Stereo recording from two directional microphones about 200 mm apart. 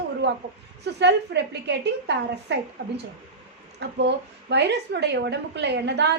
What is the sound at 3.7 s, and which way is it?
A woman's voice, 60° right (ahead or behind).